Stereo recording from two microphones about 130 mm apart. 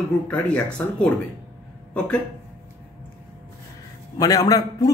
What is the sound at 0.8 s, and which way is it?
Speech, 15° left (ahead or behind).